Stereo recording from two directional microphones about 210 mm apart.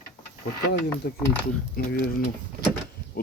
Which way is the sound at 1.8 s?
45° left (ahead or behind).